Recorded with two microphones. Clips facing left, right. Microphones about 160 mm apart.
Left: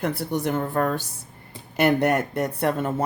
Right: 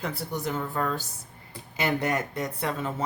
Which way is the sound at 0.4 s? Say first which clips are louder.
Left 5 dB; 55° left (ahead or behind).